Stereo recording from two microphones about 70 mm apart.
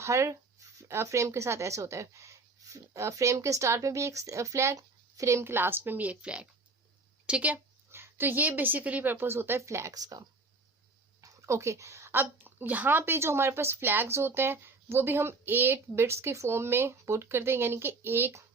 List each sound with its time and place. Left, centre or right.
0.0 s a woman's voice: right; by 7.5 s centre
7.9 s a woman's voice: right
9.9 s speech: right
11.2 s a sound: right
12.1 s speech: right